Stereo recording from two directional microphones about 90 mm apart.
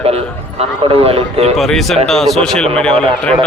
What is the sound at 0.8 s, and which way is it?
Speech, 90° right.